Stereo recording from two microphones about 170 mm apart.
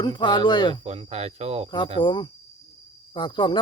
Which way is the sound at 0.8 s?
35° right (ahead or behind).